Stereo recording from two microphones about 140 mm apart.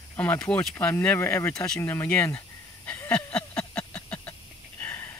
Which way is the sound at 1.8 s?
15° left (ahead or behind).